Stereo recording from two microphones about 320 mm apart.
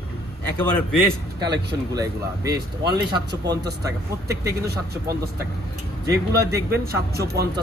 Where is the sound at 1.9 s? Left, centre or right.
Centre.